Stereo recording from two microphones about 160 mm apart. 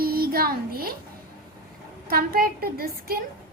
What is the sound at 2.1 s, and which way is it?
A child's voice, 65° right (ahead or behind).